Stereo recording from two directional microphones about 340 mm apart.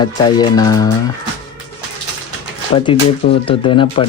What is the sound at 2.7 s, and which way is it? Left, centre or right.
Speech, centre.